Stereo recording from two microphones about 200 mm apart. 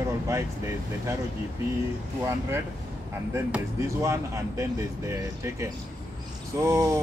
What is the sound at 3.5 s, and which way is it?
Speech, 15° right (ahead or behind).